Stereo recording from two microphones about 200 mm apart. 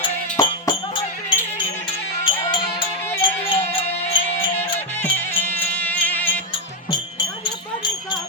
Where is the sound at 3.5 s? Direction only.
30° left (ahead or behind).